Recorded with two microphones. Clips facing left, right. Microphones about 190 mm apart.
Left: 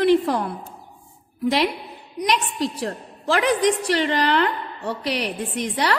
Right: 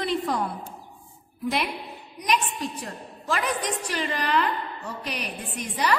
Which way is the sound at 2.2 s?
80° left.